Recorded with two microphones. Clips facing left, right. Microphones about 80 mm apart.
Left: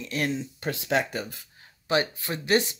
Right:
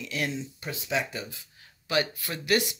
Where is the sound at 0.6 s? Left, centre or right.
Left.